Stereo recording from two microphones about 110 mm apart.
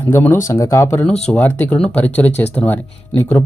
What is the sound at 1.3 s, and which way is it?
Speech, 15° left (ahead or behind).